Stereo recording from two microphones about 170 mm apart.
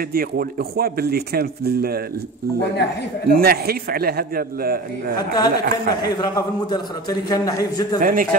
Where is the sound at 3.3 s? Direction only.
60° right (ahead or behind).